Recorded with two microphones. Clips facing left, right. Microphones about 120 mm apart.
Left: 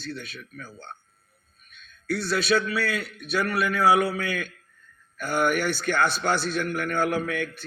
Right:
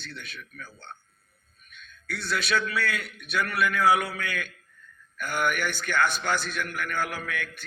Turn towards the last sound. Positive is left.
turn(degrees=40)  # may be behind; listen again after turning